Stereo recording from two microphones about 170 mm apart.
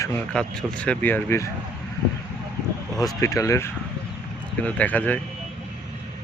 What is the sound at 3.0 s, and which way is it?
Speech, 20° left (ahead or behind).